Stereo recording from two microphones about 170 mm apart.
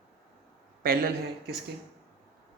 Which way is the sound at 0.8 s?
60° right (ahead or behind).